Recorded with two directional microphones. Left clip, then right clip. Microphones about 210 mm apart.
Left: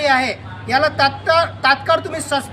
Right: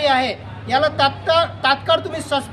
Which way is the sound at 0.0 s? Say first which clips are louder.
Left 1 dB; 5° right (ahead or behind).